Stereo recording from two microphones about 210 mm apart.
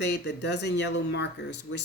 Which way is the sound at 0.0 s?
55° left (ahead or behind).